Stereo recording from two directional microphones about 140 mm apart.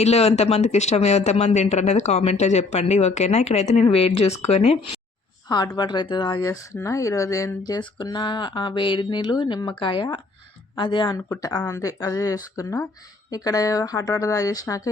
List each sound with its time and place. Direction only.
0.0 s speech: 50° left (ahead or behind)
5.5 s speech: 30° left (ahead or behind)
6.4 s speech: 25° left (ahead or behind)